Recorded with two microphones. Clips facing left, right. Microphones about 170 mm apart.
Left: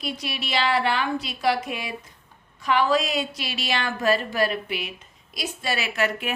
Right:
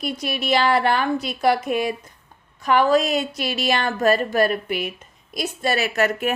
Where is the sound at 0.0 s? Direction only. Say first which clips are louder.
Right 5 dB; 50° right (ahead or behind).